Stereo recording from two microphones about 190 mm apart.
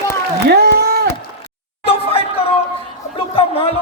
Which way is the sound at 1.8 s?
30° left (ahead or behind).